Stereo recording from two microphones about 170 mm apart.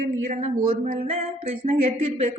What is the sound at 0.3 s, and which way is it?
A woman's voice, 40° right (ahead or behind).